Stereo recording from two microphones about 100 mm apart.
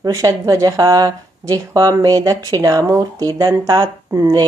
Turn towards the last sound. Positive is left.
turn(degrees=-40)  # may be behind; listen again after turning